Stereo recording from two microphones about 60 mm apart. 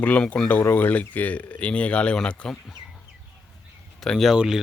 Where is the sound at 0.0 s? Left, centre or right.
Left.